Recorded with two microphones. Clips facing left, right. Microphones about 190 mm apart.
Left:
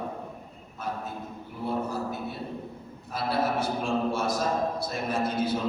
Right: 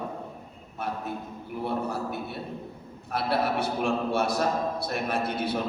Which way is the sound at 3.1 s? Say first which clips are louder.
Right 1 dB; 65° right (ahead or behind).